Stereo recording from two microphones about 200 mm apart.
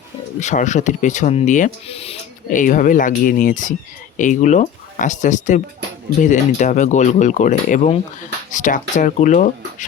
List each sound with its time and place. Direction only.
0.3 s speech: 35° left (ahead or behind)